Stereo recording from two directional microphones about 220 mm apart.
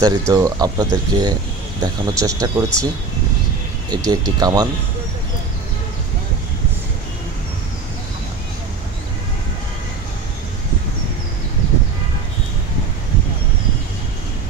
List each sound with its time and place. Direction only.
0.0 s speech: 15° right (ahead or behind)
3.9 s speech: 20° right (ahead or behind)